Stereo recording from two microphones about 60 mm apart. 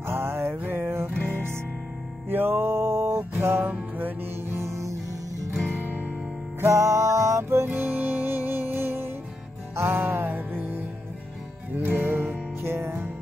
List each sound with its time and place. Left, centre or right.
0.0 s music: right
3.7 s music: right
4.6 s music: right
6.6 s music: right
7.7 s music: right